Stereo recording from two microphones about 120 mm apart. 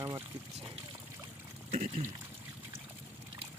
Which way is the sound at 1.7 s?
90° right.